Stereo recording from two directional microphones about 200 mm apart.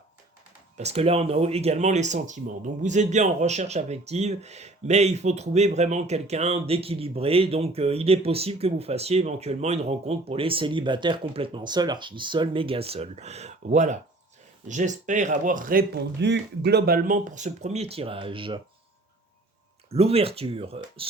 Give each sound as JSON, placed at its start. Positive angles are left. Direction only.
{"t": 0.8, "sound": "speech", "side_deg": -30}
{"t": 16.2, "sound": "speech", "side_deg": -60}
{"t": 19.9, "sound": "speech", "side_deg": -30}